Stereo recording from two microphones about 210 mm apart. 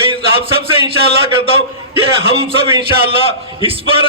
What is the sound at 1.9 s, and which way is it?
Speech, 25° right (ahead or behind).